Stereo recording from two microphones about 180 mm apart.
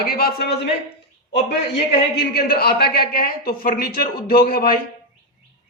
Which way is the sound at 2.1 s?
60° left (ahead or behind).